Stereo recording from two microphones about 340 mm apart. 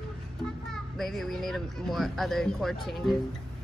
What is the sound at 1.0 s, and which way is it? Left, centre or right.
Speech, centre.